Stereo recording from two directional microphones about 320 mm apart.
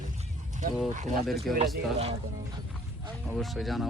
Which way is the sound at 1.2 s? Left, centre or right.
Centre.